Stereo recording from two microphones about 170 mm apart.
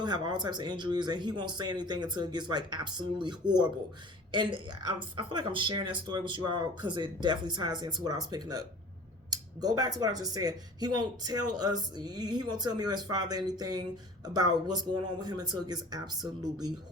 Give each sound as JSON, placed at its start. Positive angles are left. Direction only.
{"t": 0.0, "sound": "speech", "side_deg": -25}